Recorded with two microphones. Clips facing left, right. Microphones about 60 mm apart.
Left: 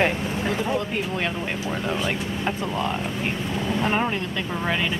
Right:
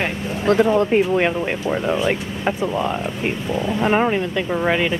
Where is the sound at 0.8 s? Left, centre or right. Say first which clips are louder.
Right 10 dB; right.